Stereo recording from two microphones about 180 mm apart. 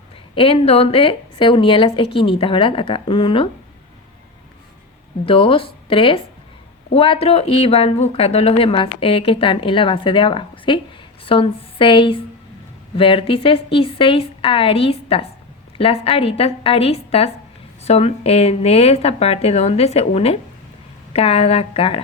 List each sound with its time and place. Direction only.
0.3 s a woman's voice: 30° left (ahead or behind)
5.2 s a woman's voice: 30° left (ahead or behind)